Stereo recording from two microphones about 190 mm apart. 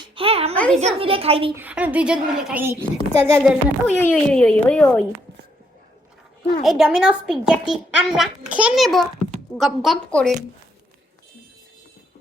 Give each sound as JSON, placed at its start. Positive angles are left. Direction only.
{"t": 0.0, "sound": "a sound", "side_deg": -30}
{"t": 0.5, "sound": "a child's voice", "side_deg": 5}
{"t": 0.8, "sound": "a child's voice", "side_deg": -30}
{"t": 1.5, "sound": "speech", "side_deg": -10}
{"t": 3.4, "sound": "a child's voice", "side_deg": -5}
{"t": 6.6, "sound": "a child's voice", "side_deg": 0}